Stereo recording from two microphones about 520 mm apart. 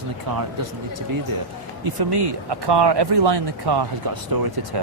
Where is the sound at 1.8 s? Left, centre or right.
Right.